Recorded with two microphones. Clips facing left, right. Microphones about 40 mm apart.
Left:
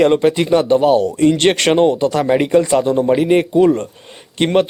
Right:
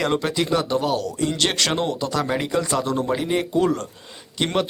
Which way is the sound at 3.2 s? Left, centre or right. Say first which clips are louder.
Left 9 dB; left.